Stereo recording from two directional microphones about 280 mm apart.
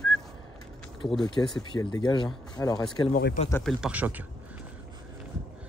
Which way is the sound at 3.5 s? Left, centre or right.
Centre.